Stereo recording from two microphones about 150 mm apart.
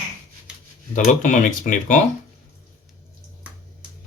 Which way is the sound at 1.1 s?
55° left (ahead or behind).